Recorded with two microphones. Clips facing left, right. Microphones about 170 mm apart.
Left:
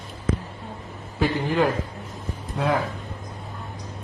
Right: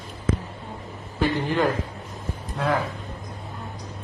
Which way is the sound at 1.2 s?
5° left (ahead or behind).